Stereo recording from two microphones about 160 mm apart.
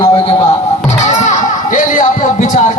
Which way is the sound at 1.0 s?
50° left (ahead or behind).